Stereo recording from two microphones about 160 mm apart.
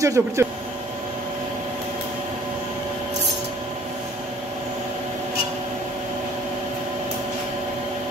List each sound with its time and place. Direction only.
0.0 s speech: 20° right (ahead or behind)